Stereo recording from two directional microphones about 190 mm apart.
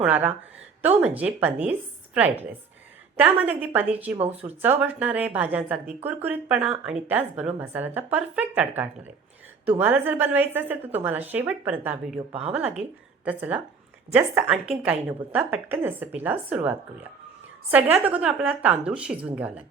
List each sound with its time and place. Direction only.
0.0 s a woman's voice: 10° right (ahead or behind)
4.2 s speech: 35° right (ahead or behind)
4.6 s a woman's voice: 10° right (ahead or behind)
13.2 s a woman's voice: 10° right (ahead or behind)